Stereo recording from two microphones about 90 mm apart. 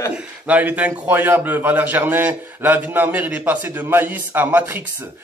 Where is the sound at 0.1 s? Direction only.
15° right (ahead or behind).